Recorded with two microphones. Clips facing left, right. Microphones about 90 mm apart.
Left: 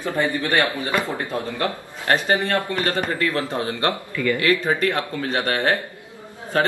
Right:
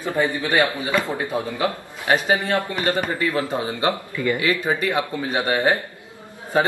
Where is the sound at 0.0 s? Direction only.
15° right (ahead or behind).